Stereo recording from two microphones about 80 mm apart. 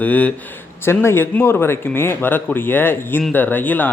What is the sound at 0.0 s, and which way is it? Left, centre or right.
Speech, centre.